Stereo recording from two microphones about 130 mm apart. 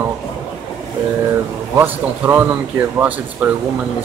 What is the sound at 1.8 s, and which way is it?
Speech, 15° right (ahead or behind).